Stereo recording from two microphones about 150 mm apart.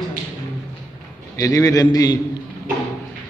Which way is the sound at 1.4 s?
25° left (ahead or behind).